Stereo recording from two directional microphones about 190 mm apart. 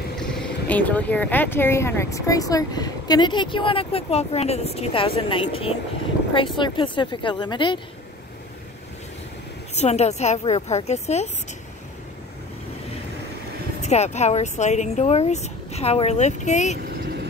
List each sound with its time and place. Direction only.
0.2 s speech: 5° left (ahead or behind); by 7.8 s 25° left (ahead or behind)
9.8 s speech: 35° left (ahead or behind)
13.7 s speech: 35° left (ahead or behind)
16.7 s vehicle: 55° right (ahead or behind)